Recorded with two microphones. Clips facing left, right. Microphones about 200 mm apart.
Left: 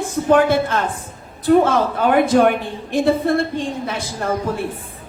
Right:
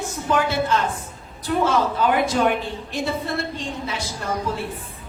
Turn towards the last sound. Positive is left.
turn(degrees=55)  # may be behind; listen again after turning